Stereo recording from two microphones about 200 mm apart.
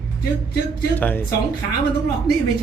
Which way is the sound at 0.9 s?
10° left (ahead or behind).